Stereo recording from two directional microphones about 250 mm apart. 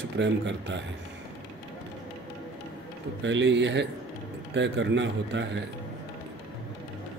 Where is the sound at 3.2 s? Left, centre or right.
Right.